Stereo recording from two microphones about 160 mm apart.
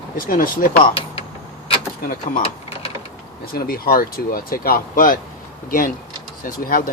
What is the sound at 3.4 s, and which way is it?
Speech, 65° left (ahead or behind).